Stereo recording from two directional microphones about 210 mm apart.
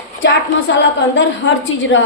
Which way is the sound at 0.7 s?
60° left (ahead or behind).